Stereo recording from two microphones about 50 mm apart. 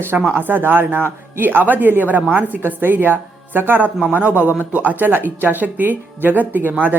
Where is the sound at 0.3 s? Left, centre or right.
Right.